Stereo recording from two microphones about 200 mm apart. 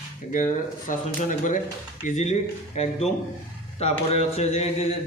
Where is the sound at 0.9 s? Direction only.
40° left (ahead or behind).